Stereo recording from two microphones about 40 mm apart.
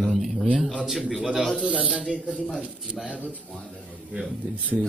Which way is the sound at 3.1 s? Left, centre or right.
Right.